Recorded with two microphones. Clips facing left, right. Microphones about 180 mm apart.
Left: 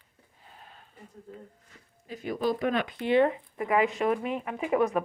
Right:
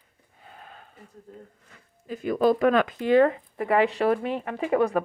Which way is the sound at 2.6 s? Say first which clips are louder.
Right 7 dB; 90° right.